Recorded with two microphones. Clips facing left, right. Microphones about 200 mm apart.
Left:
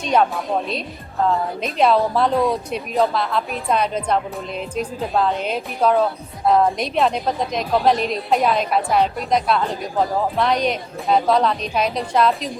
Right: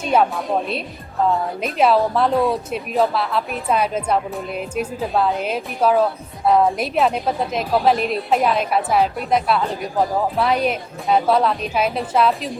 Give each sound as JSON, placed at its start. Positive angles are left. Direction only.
{"t": 0.0, "sound": "speech", "side_deg": -5}